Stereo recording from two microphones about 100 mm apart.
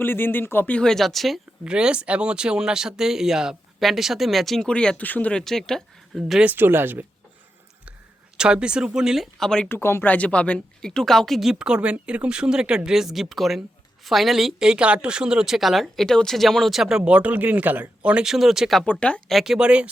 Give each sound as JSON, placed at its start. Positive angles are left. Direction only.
{"t": 0.0, "sound": "speech", "side_deg": 20}
{"t": 1.6, "sound": "speech", "side_deg": -10}
{"t": 5.4, "sound": "speech", "side_deg": 5}
{"t": 6.4, "sound": "speech", "side_deg": -20}
{"t": 8.4, "sound": "speech", "side_deg": -10}
{"t": 9.6, "sound": "speech", "side_deg": 25}
{"t": 17.0, "sound": "speech", "side_deg": -10}
{"t": 18.8, "sound": "speech", "side_deg": 10}
{"t": 19.3, "sound": "speech", "side_deg": -5}